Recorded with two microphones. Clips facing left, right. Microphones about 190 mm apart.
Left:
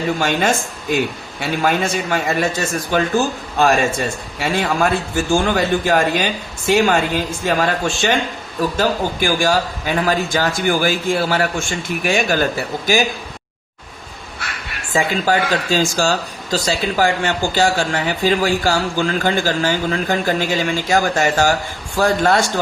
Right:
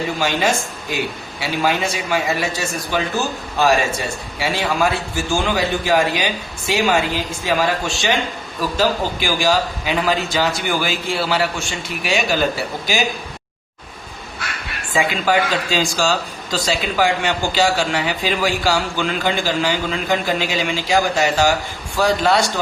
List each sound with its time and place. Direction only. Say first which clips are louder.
0.2 s a man's voice: left 1 dB; 55° left (ahead or behind)
8.8 s a man's voice: even; 50° left (ahead or behind)
14.9 s a man's voice: left 1 dB; 45° left (ahead or behind)